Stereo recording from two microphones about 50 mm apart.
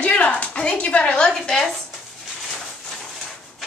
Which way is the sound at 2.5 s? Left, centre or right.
Centre.